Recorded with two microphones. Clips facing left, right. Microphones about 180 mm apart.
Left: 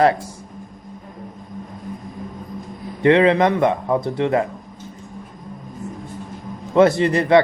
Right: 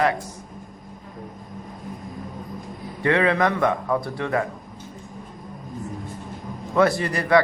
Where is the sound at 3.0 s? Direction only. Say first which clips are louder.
Left 6 dB; 20° left (ahead or behind).